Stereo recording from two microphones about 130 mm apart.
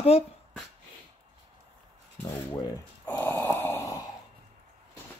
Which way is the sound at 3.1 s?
15° left (ahead or behind).